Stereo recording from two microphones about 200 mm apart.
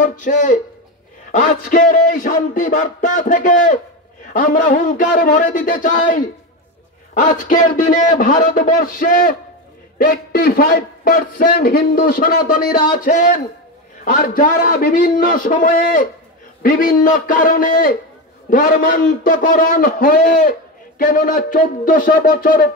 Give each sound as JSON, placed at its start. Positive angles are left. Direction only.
{"t": 0.0, "sound": "speech", "side_deg": 40}
{"t": 1.3, "sound": "a sound", "side_deg": 40}
{"t": 7.2, "sound": "a man's voice", "side_deg": 40}